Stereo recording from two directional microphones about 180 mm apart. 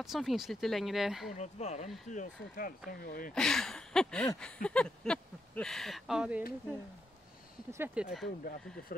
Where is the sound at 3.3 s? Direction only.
5° left (ahead or behind).